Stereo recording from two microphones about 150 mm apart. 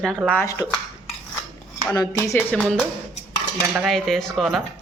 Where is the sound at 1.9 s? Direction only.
25° left (ahead or behind).